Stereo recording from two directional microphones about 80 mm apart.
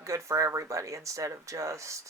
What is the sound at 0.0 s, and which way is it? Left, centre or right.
A woman's voice, right.